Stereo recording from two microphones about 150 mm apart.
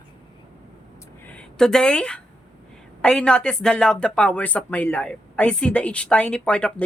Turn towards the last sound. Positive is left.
turn(degrees=5)  # may be behind; listen again after turning